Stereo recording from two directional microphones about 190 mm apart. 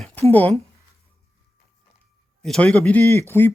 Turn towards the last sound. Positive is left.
turn(degrees=10)  # may be behind; listen again after turning